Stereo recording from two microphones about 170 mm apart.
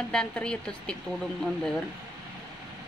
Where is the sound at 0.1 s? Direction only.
5° left (ahead or behind).